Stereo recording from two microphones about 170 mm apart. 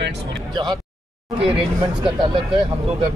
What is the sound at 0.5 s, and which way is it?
Speech, 25° right (ahead or behind).